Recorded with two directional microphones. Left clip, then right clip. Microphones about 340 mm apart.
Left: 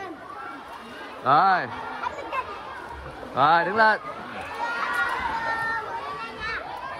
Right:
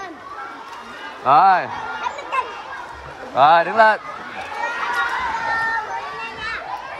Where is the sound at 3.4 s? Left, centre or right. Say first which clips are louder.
Right 6 dB; centre.